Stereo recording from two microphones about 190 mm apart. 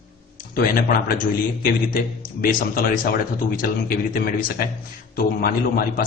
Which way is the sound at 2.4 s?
50° left (ahead or behind).